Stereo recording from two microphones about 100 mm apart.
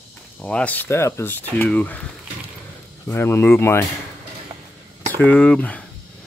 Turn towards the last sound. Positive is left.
turn(degrees=15)  # may be behind; listen again after turning